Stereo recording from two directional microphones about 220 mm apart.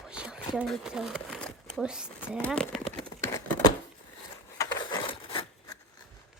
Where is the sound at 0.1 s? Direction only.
5° right (ahead or behind).